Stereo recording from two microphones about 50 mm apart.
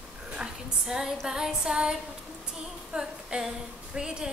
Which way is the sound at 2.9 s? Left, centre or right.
Centre.